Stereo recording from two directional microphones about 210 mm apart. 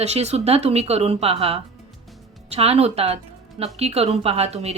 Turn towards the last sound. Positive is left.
turn(degrees=-30)  # may be behind; listen again after turning